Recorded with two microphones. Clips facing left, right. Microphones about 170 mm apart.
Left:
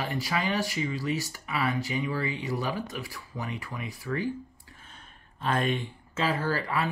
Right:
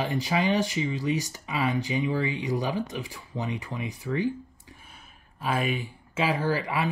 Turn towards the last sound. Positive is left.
turn(degrees=-15)  # may be behind; listen again after turning